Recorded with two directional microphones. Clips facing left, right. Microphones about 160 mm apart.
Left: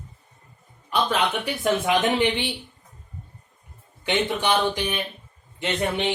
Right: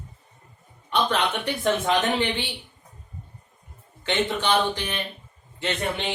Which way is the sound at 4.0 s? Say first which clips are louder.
Left 1 dB; 10° left (ahead or behind).